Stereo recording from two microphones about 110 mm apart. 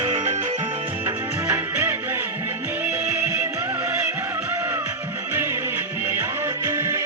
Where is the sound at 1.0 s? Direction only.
20° right (ahead or behind).